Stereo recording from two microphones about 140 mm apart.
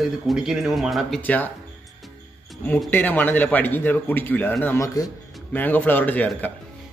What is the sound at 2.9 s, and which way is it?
A man's voice, 15° left (ahead or behind).